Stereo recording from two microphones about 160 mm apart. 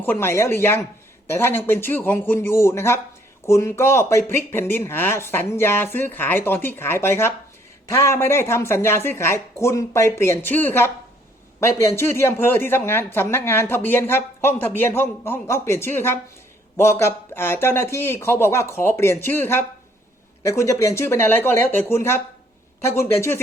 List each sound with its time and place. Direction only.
0.0 s speech: 15° left (ahead or behind)